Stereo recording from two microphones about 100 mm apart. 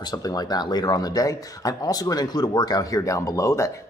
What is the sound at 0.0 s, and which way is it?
Speech, 40° left (ahead or behind).